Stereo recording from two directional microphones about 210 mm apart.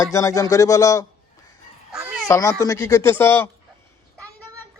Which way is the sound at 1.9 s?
5° right (ahead or behind).